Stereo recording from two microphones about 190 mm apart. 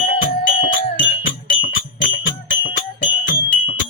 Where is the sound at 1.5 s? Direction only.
90° left.